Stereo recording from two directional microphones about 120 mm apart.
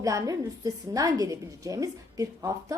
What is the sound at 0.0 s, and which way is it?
Speech, 30° right (ahead or behind).